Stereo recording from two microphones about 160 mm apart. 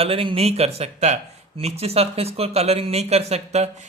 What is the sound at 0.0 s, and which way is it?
Speech, 35° right (ahead or behind).